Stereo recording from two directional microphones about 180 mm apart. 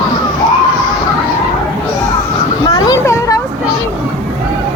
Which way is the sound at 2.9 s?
15° left (ahead or behind).